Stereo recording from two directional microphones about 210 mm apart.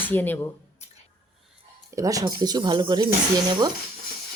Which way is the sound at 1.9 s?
15° right (ahead or behind).